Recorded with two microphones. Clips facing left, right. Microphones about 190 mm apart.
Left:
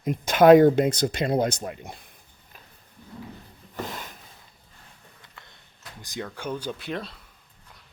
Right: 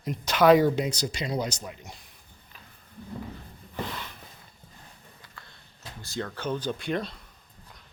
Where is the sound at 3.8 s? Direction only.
45° left (ahead or behind).